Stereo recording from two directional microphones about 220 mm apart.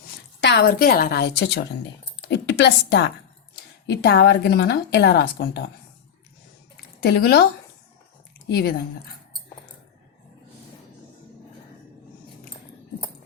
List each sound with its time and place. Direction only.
0.4 s a woman's voice: 50° left (ahead or behind)
7.0 s a woman's voice: 45° left (ahead or behind)
8.4 s a woman's voice: 45° left (ahead or behind)